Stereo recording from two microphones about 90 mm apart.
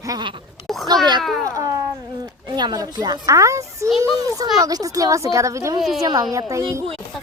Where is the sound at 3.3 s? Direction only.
35° right (ahead or behind).